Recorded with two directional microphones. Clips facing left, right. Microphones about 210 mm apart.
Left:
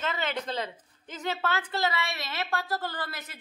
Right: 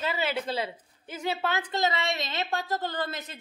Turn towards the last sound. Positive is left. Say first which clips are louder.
# right 5 dB
turn(degrees=-20)  # may be behind; listen again after turning